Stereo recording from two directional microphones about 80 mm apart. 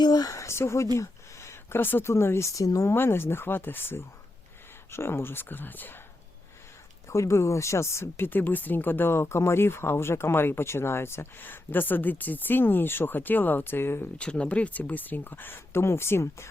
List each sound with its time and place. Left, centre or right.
0.0 s a sound: left
0.9 s speech: left
2.6 s speech: left
2.9 s speech: left
7.1 s speech: left
14.2 s speech: centre; by 16.5 s left